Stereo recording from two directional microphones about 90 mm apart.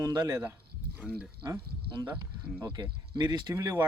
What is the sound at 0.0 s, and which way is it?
Speech, 50° right (ahead or behind).